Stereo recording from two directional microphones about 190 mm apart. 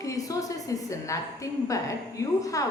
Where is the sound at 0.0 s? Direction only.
15° left (ahead or behind).